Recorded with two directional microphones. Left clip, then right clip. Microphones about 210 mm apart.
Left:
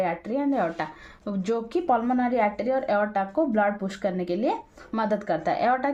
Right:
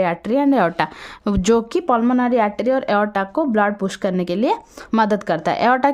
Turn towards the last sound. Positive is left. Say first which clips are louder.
# right 7 dB
turn(degrees=-50)  # may be behind; listen again after turning